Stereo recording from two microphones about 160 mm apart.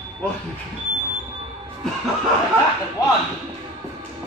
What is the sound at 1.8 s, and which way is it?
Music, centre (ahead or behind).